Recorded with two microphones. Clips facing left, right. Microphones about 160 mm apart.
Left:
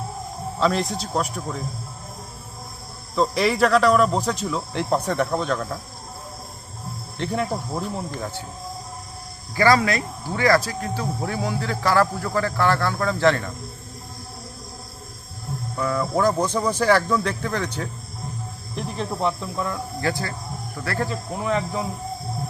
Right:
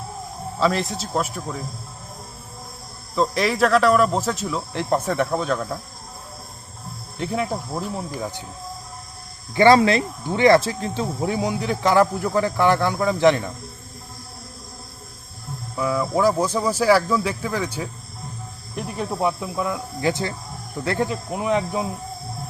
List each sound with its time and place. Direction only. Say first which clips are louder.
0.6 s speech: even; centre (ahead or behind)
3.2 s speech: even; centre (ahead or behind)
7.2 s speech: even; centre (ahead or behind)
9.6 s speech: right 4 dB; 25° right (ahead or behind)
15.7 s speech: right 1 dB; 5° right (ahead or behind)